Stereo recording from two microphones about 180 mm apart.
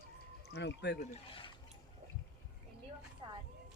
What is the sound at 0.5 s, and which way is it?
Speech, 65° left (ahead or behind).